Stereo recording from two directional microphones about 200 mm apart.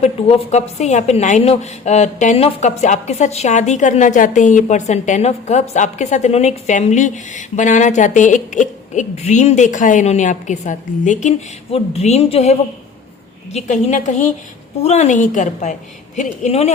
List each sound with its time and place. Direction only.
0.0 s a woman's voice: 30° left (ahead or behind)